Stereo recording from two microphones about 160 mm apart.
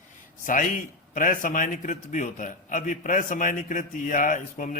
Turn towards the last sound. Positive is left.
turn(degrees=55)  # may be behind; listen again after turning